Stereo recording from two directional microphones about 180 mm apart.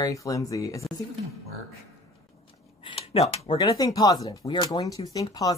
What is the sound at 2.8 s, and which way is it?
Speech, 30° left (ahead or behind).